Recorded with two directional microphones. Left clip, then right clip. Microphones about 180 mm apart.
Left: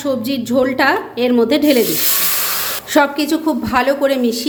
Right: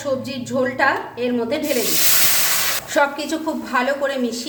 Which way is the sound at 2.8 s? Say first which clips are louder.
Left 7 dB; 45° left (ahead or behind).